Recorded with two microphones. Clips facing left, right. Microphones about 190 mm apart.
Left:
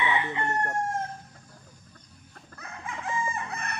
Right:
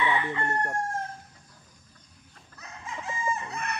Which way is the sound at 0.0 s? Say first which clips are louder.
Right 1 dB; 20° left (ahead or behind).